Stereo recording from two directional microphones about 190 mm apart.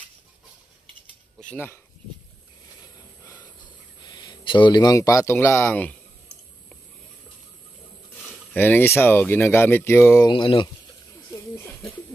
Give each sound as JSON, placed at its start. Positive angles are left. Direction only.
{"t": 1.5, "sound": "speech", "side_deg": 10}
{"t": 4.0, "sound": "speech", "side_deg": 25}
{"t": 8.3, "sound": "a sound", "side_deg": 10}
{"t": 9.0, "sound": "speech", "side_deg": 10}